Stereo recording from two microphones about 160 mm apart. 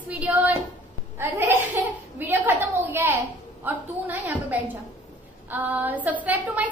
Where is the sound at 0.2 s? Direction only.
10° right (ahead or behind).